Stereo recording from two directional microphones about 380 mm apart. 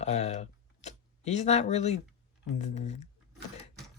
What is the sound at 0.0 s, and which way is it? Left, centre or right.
Speech, centre.